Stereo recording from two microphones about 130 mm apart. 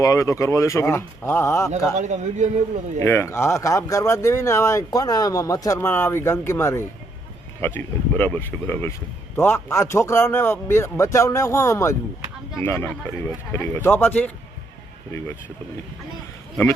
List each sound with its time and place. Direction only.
0.0 s speech: 25° left (ahead or behind)
2.0 s a man's voice: 65° right (ahead or behind)
3.0 s speech: 20° left (ahead or behind)